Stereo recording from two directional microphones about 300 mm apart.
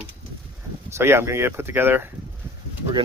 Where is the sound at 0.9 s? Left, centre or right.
Centre.